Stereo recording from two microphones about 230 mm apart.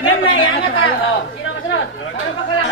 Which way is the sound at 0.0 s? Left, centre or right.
Left.